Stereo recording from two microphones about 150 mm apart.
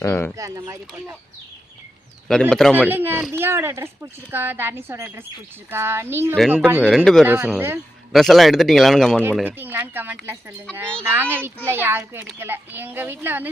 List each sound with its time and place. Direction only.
0.0 s speech: 15° left (ahead or behind)
0.3 s speech: 20° right (ahead or behind)
2.2 s speech: 5° left (ahead or behind)
2.7 s a woman's voice: 15° right (ahead or behind)
6.8 s speech: 5° left (ahead or behind)
7.3 s a woman's voice: 10° right (ahead or behind)
8.1 s speech: centre (ahead or behind)
9.4 s a woman's voice: 10° right (ahead or behind)